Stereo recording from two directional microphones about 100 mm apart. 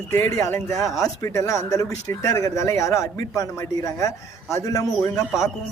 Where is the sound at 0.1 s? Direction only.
30° left (ahead or behind).